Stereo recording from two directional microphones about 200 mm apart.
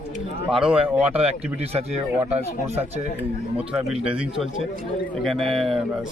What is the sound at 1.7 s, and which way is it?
Speech, 30° right (ahead or behind).